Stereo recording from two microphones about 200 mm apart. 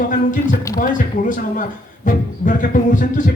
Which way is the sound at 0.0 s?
45° left (ahead or behind).